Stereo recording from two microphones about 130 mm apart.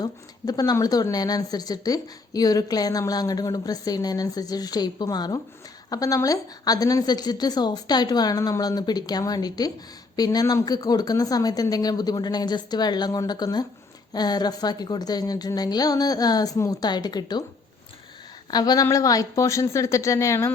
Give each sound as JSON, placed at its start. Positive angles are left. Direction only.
{"t": 0.0, "sound": "a woman's voice", "side_deg": 30}
{"t": 18.5, "sound": "a woman's voice", "side_deg": 30}